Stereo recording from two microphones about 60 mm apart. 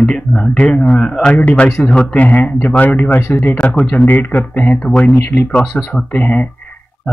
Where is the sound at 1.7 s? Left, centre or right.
Centre; by 4.4 s left.